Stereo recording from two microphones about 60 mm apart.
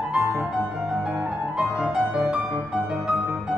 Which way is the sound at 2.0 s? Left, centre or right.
Right.